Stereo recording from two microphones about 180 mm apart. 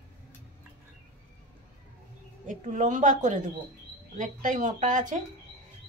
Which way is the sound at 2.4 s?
45° right (ahead or behind).